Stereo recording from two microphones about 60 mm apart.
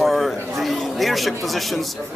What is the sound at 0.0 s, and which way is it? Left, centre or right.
A man's voice, centre.